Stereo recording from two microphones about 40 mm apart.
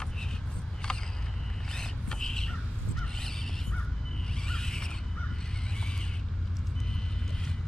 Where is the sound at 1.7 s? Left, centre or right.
Centre.